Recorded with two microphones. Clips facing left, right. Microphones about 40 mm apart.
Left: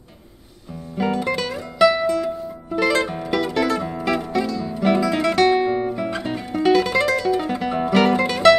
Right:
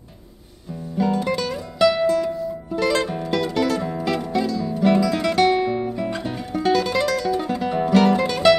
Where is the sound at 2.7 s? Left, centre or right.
Centre.